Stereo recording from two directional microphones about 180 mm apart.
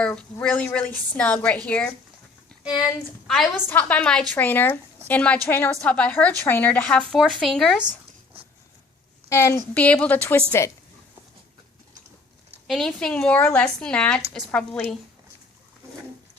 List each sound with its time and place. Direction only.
0.0 s a woman's voice: 10° left (ahead or behind)
3.2 s a woman's voice: centre (ahead or behind)
7.9 s writing: 30° right (ahead or behind)
9.3 s a woman's voice: 15° left (ahead or behind)
12.6 s speech: centre (ahead or behind)